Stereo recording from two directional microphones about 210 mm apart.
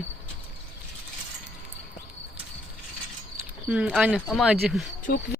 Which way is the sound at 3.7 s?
5° right (ahead or behind).